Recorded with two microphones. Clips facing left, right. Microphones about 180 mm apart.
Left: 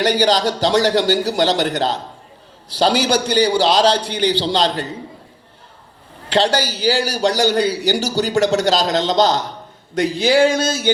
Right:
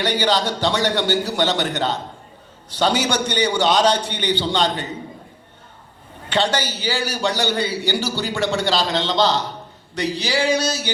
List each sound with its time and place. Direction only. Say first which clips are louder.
0.0 s a man's voice: left 4 dB; 40° left (ahead or behind)
6.3 s a man's voice: left 4 dB; 35° left (ahead or behind)
9.9 s male singing: left 7 dB; 50° left (ahead or behind)